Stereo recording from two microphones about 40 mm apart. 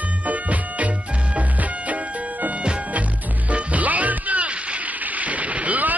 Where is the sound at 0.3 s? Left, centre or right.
Right.